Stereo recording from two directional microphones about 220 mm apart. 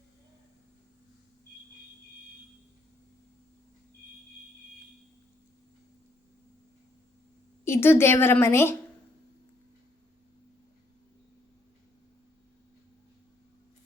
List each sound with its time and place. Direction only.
7.6 s a woman's voice: 10° left (ahead or behind)